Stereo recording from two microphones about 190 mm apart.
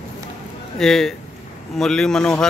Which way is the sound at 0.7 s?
Centre (ahead or behind).